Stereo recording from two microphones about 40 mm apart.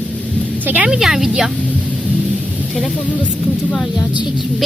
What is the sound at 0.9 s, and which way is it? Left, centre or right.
Speech, centre.